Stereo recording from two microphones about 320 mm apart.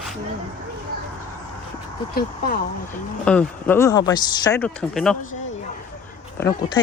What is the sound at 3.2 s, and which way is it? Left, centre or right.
Speech, centre.